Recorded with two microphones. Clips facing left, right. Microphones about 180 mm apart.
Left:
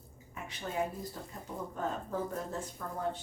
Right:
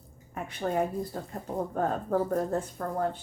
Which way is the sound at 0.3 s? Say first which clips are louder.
Right 7 dB; 55° right (ahead or behind).